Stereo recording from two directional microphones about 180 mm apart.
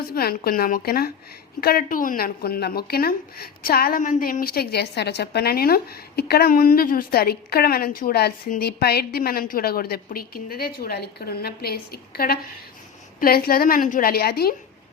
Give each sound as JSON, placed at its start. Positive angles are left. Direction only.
{"t": 0.1, "sound": "speech", "side_deg": 60}